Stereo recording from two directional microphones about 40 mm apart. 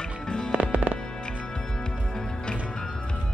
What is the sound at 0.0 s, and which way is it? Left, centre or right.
Music, left.